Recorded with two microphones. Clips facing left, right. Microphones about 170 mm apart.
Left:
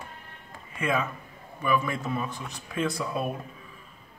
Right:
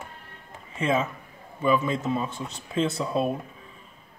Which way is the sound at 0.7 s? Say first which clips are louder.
Right 3 dB; 25° right (ahead or behind).